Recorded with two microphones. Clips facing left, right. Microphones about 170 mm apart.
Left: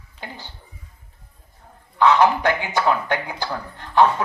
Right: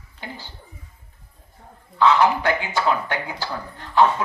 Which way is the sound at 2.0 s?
20° left (ahead or behind).